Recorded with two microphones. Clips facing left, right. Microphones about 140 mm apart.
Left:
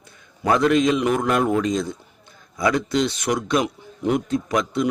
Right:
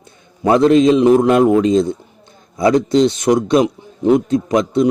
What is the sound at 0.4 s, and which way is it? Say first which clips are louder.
A man's voice: right 7 dB; 30° right (ahead or behind).